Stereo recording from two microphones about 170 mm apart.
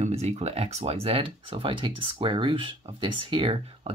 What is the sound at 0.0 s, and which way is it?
Speech, 40° right (ahead or behind).